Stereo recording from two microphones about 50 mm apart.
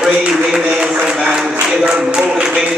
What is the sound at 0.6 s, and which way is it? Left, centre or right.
A man's voice, centre.